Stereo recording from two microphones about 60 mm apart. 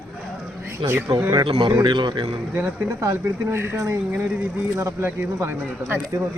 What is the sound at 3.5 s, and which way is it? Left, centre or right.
Speech, right.